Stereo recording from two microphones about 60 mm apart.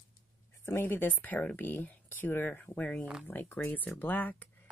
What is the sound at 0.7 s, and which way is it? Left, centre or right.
Speech, left.